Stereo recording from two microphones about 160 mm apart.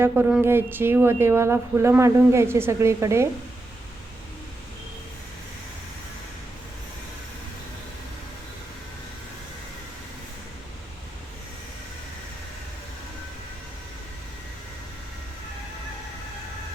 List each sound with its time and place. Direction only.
0.0 s speech: 10° right (ahead or behind)